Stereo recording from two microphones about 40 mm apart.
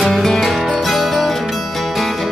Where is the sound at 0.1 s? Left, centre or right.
Centre.